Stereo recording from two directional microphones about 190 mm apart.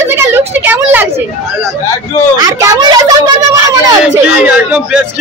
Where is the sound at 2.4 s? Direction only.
20° right (ahead or behind).